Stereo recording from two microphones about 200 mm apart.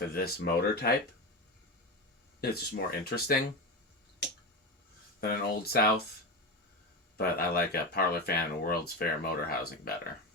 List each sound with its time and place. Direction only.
0.0 s speech: 50° left (ahead or behind)
2.4 s speech: 50° left (ahead or behind)
5.3 s speech: 50° left (ahead or behind)
7.2 s speech: 50° left (ahead or behind)